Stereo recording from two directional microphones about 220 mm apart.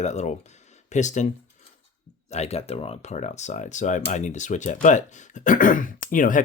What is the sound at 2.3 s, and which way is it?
Speech, 30° left (ahead or behind).